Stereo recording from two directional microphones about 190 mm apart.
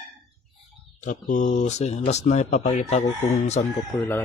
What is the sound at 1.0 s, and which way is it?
Speech, 40° left (ahead or behind).